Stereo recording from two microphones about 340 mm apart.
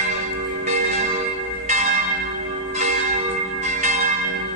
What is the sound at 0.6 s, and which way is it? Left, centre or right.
Church bell, centre.